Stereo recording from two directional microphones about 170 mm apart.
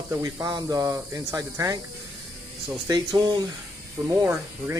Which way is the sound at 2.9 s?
25° right (ahead or behind).